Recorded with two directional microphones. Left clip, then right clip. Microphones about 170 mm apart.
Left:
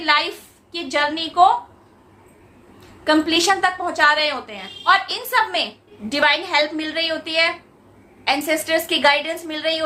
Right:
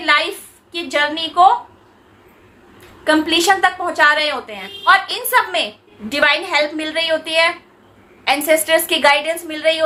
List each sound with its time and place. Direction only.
0.0 s a woman's voice: 15° right (ahead or behind)
3.0 s a woman's voice: 10° right (ahead or behind)